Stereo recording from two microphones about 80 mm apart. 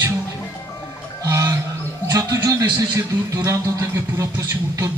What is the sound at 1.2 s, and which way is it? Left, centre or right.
Music, right.